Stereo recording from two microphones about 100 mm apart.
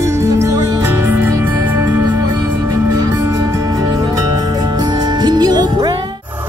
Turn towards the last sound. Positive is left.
turn(degrees=-45)  # may be behind; listen again after turning